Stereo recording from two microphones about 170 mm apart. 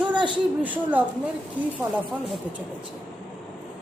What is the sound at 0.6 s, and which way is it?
Speech, 10° right (ahead or behind).